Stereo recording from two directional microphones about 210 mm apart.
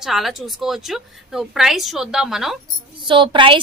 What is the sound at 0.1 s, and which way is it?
A woman's voice, centre (ahead or behind).